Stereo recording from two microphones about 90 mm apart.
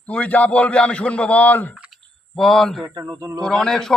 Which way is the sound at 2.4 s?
5° left (ahead or behind).